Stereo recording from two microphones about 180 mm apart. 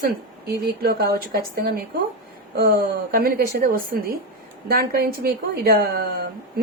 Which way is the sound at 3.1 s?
55° right (ahead or behind).